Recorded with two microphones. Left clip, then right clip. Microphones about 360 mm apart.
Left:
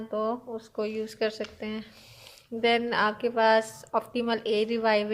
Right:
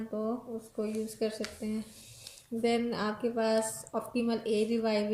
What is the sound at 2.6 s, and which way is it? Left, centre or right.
A woman's voice, left.